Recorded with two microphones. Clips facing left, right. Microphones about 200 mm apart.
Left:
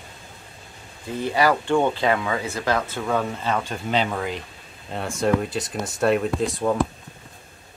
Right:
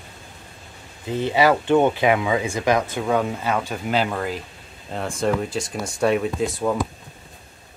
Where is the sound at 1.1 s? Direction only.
20° right (ahead or behind); by 6.7 s centre (ahead or behind).